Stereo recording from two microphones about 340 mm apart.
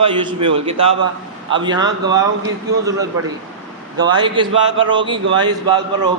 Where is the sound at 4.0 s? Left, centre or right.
Centre.